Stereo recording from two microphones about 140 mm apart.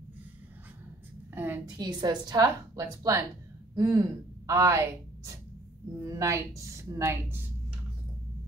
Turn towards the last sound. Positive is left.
turn(degrees=-15)  # may be behind; listen again after turning